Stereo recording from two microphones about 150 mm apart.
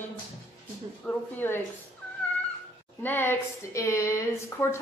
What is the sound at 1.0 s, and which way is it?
Speech, 15° left (ahead or behind).